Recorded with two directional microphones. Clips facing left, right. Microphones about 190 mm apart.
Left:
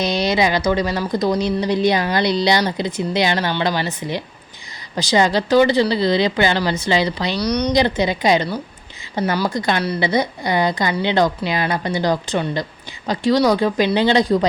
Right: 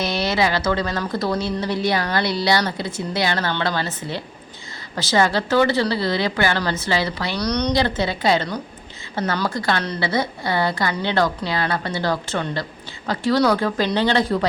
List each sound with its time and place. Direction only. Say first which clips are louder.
0.0 s a woman's voice: left 3 dB; 15° left (ahead or behind)